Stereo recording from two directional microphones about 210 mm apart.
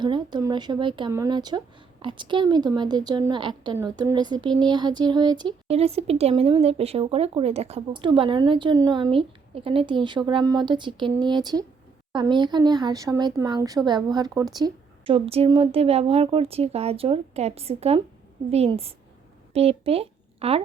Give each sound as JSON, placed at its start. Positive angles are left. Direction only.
{"t": 0.0, "sound": "speech", "side_deg": -20}